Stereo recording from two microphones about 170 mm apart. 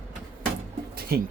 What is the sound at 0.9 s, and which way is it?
Music, 60° right (ahead or behind).